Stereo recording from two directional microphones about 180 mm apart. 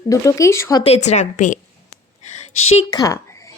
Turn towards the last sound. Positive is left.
turn(degrees=20)  # may be behind; listen again after turning